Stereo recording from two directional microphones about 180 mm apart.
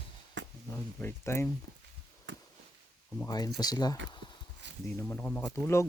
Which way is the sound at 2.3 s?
90° right.